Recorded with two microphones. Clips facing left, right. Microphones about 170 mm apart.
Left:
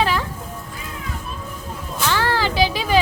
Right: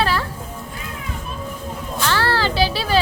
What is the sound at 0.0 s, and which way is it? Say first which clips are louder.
Music: even; 15° left (ahead or behind).